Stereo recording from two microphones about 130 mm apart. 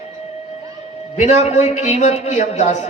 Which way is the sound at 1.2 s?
60° left (ahead or behind).